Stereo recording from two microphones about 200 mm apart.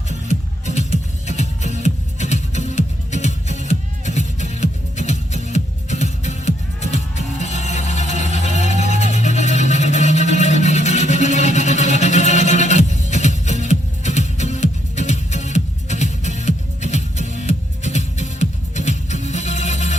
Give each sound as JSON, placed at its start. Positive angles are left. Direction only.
{"t": 0.3, "sound": "music", "side_deg": 35}
{"t": 8.6, "sound": "vehicle", "side_deg": 35}